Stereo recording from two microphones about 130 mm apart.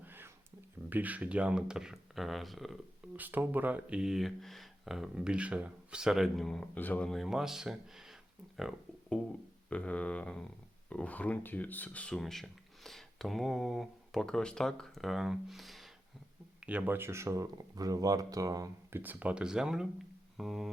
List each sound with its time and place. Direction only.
0.0 s a sound: 15° right (ahead or behind)
0.9 s speech: 15° right (ahead or behind)
3.2 s speech: 15° right (ahead or behind)
16.6 s speech: 10° right (ahead or behind)